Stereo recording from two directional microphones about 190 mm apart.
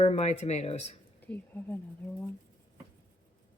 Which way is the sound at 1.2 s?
10° left (ahead or behind).